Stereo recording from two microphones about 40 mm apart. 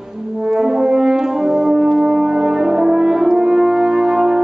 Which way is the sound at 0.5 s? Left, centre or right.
Centre.